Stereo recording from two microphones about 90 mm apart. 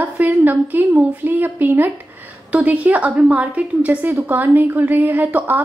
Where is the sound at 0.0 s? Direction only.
20° right (ahead or behind).